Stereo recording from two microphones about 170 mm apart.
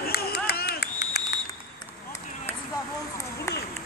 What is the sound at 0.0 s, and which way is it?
Run, 65° left (ahead or behind).